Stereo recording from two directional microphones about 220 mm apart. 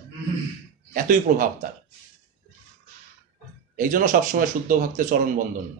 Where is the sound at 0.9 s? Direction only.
40° right (ahead or behind).